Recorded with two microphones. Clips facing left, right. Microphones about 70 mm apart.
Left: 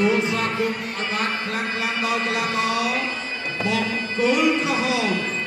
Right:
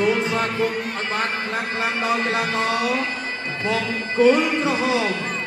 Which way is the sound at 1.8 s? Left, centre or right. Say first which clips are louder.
Right 3 dB; right.